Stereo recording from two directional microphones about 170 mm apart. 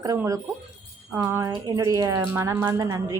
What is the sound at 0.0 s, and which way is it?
Speech, 20° right (ahead or behind).